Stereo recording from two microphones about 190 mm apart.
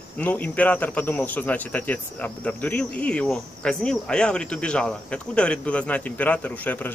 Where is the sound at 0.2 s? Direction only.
10° left (ahead or behind).